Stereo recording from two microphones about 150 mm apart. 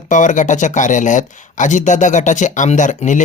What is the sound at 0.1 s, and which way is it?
Speech, 55° left (ahead or behind).